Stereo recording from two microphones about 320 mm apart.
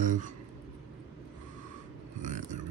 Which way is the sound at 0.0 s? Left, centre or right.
Right.